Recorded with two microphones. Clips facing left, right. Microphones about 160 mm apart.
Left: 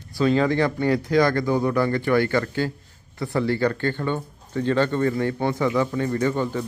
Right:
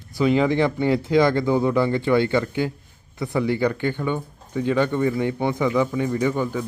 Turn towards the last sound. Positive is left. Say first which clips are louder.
# right 1 dB
turn(degrees=-10)  # may be behind; listen again after turning